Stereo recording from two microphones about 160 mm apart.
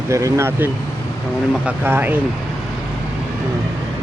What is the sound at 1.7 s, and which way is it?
Speech, 10° right (ahead or behind).